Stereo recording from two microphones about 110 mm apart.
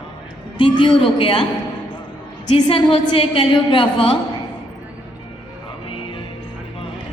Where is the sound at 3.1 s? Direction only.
55° left (ahead or behind).